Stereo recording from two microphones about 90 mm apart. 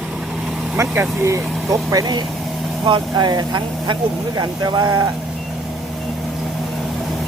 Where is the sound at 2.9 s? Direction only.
50° right (ahead or behind).